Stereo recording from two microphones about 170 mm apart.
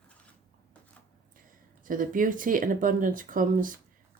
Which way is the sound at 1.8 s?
50° right (ahead or behind).